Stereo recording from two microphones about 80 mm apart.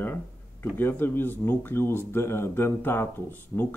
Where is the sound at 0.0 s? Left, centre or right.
Left.